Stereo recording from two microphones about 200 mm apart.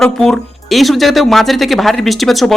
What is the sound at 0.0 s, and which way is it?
Speech, centre (ahead or behind).